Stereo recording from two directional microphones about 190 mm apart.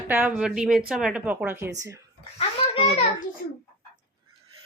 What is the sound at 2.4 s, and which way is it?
Speech, 30° left (ahead or behind).